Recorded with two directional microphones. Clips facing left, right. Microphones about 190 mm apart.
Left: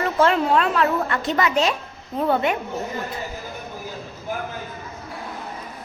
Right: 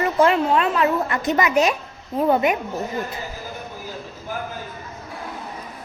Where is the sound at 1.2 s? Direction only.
15° right (ahead or behind).